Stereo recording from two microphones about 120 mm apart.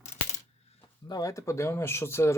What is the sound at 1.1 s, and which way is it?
Speech, 30° left (ahead or behind).